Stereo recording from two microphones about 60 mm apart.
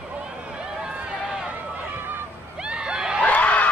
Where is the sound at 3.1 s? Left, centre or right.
Left.